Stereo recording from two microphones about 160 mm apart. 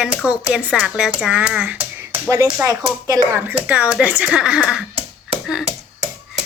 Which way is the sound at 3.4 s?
10° right (ahead or behind).